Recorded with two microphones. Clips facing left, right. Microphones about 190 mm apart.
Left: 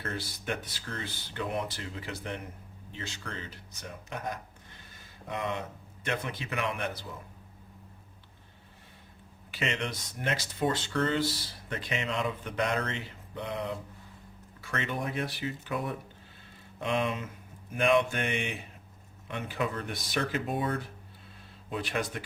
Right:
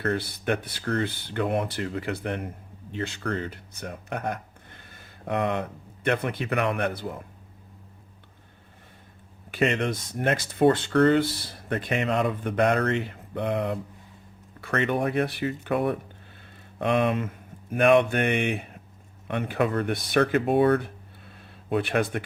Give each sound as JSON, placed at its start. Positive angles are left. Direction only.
{"t": 0.0, "sound": "speech", "side_deg": -60}
{"t": 9.5, "sound": "speech", "side_deg": -55}